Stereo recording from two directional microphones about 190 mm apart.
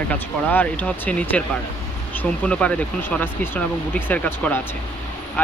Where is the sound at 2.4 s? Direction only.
5° left (ahead or behind).